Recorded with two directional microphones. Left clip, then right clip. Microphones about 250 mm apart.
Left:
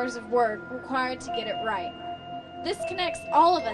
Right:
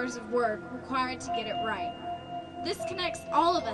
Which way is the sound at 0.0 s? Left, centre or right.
Left.